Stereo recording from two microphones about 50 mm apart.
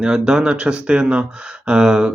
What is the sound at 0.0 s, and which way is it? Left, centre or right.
Speech, centre.